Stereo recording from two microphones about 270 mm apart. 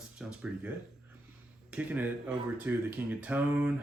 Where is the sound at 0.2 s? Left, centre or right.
Centre.